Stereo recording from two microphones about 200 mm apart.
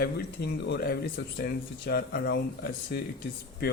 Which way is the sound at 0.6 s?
55° left (ahead or behind).